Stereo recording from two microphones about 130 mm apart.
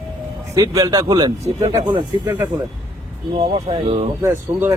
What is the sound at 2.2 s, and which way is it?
Speech, 15° right (ahead or behind).